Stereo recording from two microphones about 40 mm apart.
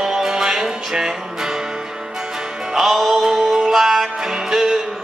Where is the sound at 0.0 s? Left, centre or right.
Centre.